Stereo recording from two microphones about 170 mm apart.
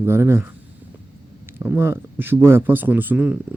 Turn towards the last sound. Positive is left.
turn(degrees=-10)  # may be behind; listen again after turning